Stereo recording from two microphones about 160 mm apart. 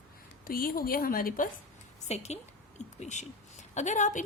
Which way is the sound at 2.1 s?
45° left (ahead or behind).